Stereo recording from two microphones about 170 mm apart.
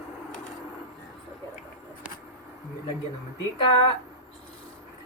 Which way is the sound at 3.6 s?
30° left (ahead or behind).